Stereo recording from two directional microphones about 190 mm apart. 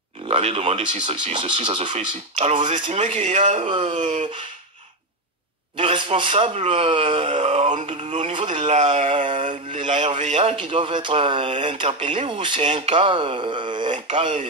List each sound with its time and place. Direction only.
0.3 s speech: 30° right (ahead or behind)
3.6 s speech: 25° right (ahead or behind)
3.9 s speech: 40° right (ahead or behind)
5.8 s speech: 25° right (ahead or behind)
9.2 s mantra: 40° right (ahead or behind)
9.8 s speech: 40° right (ahead or behind)